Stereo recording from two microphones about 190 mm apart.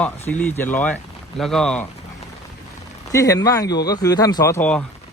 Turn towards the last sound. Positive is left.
turn(degrees=10)  # may be behind; listen again after turning